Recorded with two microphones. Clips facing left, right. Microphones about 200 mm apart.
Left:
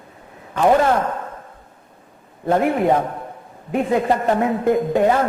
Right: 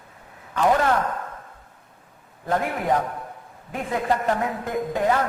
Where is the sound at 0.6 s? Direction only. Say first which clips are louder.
Left 5 dB; 30° left (ahead or behind).